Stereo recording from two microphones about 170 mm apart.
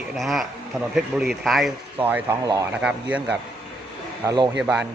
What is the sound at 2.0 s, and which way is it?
Speech, 10° right (ahead or behind).